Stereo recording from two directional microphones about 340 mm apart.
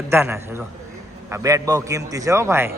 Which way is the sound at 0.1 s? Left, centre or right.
Centre.